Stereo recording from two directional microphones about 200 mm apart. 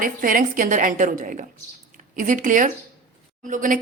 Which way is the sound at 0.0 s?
45° right (ahead or behind).